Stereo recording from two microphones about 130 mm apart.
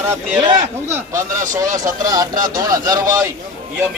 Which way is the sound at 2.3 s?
90° right.